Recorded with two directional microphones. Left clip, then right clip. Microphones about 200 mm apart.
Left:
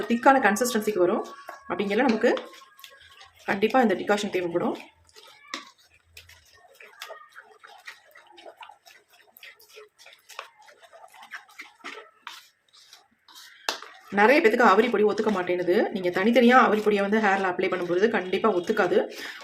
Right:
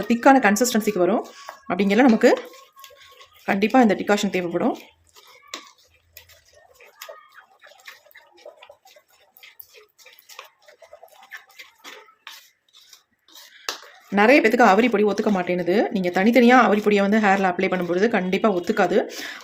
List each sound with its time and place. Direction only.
0.1 s speech: 40° right (ahead or behind)
3.4 s speech: 40° right (ahead or behind)
11.3 s a sound: centre (ahead or behind)
14.2 s speech: 35° right (ahead or behind)